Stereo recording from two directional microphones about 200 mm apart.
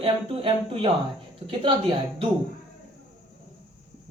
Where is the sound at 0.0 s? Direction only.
30° right (ahead or behind).